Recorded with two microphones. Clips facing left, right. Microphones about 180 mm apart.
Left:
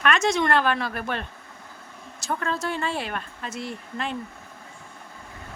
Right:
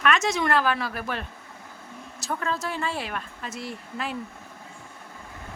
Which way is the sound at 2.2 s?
Centre (ahead or behind).